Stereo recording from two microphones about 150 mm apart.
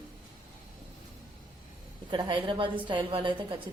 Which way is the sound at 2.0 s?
30° right (ahead or behind).